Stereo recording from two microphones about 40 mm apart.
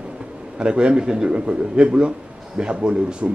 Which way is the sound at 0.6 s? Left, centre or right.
Right.